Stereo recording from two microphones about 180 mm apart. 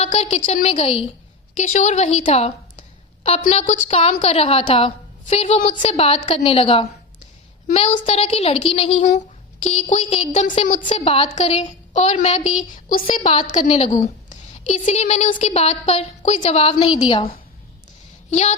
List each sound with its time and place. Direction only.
0.0 s a woman's voice: 35° left (ahead or behind)
12.9 s a woman's voice: 50° left (ahead or behind)
13.5 s a woman's voice: 35° left (ahead or behind)
18.3 s a woman's voice: 40° left (ahead or behind)